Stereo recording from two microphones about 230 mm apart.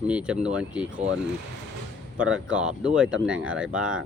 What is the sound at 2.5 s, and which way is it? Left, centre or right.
Speech, centre.